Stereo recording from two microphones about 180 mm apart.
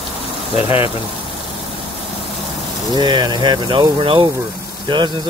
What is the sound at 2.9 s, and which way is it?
Speech, 25° right (ahead or behind).